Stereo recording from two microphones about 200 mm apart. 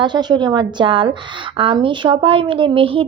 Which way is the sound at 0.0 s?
20° right (ahead or behind).